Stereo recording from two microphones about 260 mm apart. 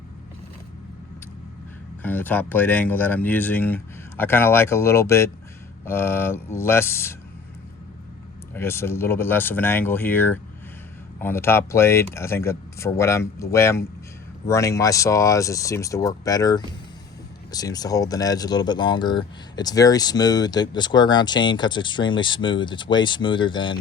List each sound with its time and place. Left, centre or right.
2.0 s speech: centre
8.5 s speech: centre